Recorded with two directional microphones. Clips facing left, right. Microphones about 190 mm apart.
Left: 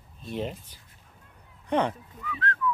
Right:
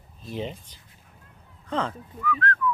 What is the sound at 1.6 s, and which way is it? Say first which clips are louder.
Speech: left 3 dB; 15° left (ahead or behind).